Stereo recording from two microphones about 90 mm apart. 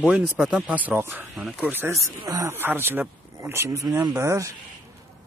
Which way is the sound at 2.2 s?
35° right (ahead or behind).